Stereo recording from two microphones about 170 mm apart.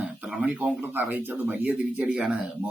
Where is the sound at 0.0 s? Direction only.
10° right (ahead or behind).